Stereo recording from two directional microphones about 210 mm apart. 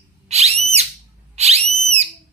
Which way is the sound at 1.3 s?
30° right (ahead or behind).